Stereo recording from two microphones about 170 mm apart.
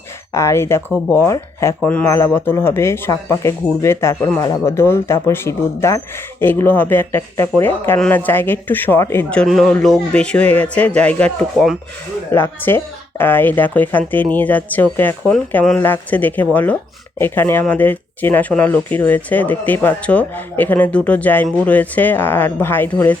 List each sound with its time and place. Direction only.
0.3 s speech: 15° left (ahead or behind)